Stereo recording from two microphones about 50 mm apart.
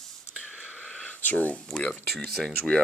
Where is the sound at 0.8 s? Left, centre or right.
Left.